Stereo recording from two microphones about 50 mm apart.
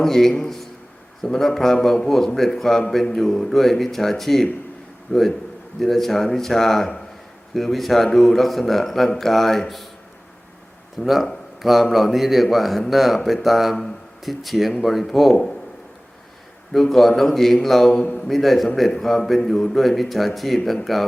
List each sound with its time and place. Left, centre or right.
0.0 s a man's voice: centre
5.1 s a man's voice: centre
5.8 s a man's voice: centre
10.9 s a man's voice: centre
15.3 s a man's voice: centre
16.9 s a man's voice: centre